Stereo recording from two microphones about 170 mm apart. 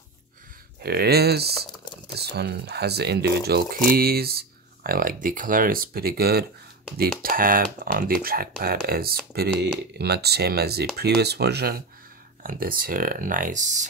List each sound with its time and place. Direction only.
0.8 s speech: 65° right (ahead or behind)
12.4 s speech: 55° right (ahead or behind)